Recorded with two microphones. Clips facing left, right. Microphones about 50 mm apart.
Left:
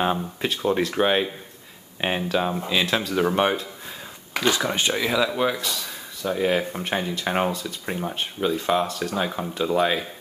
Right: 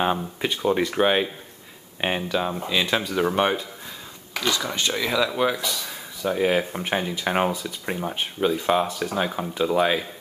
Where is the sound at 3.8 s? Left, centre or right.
Centre.